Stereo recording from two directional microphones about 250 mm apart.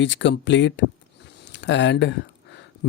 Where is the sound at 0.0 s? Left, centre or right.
Left.